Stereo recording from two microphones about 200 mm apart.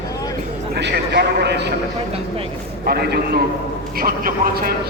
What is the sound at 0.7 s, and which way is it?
A man's voice, 55° right (ahead or behind).